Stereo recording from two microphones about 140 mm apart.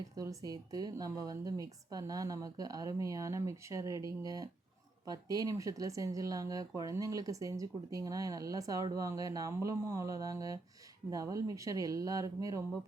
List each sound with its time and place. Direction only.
0.2 s speech: 25° right (ahead or behind)